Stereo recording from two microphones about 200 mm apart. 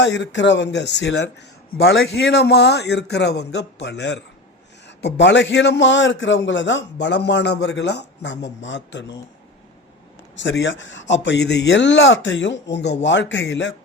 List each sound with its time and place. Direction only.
0.0 s a man's voice: 60° left (ahead or behind)
1.8 s a man's voice: 70° left (ahead or behind)
10.3 s a man's voice: 65° left (ahead or behind)